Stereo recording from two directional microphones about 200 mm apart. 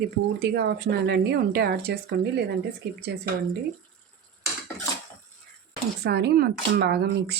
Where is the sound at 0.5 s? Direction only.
55° right (ahead or behind).